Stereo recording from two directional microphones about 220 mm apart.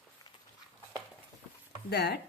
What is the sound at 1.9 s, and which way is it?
Speech, 45° left (ahead or behind).